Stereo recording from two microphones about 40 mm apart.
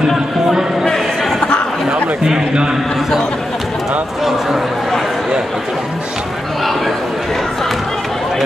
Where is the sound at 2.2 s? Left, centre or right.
Centre.